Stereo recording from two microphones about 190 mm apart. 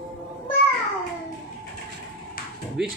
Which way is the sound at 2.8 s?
5° right (ahead or behind).